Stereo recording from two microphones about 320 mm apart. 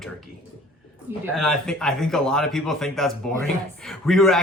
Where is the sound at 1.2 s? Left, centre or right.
Centre.